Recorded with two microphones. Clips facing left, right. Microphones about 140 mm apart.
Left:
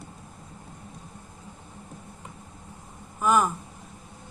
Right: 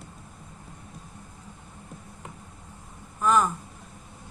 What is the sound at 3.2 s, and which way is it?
Speech, 5° left (ahead or behind).